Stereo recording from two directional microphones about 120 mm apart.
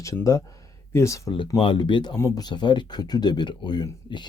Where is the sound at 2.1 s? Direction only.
30° left (ahead or behind).